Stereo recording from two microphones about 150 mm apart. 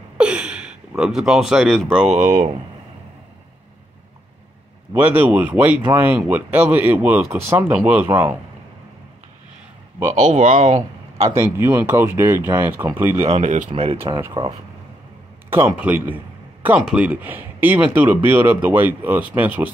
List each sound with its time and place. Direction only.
0.2 s speech: 5° right (ahead or behind)
2.0 s speech: 55° right (ahead or behind)
4.9 s speech: 15° right (ahead or behind)
10.1 s speech: 50° right (ahead or behind)
11.2 s speech: 20° right (ahead or behind)
13.2 s speech: 45° right (ahead or behind)
15.5 s speech: 10° right (ahead or behind)